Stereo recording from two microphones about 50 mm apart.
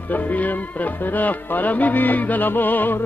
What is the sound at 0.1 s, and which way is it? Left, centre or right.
Speech, left.